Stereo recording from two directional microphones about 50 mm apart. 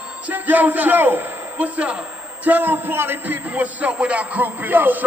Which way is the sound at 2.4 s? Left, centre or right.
Right.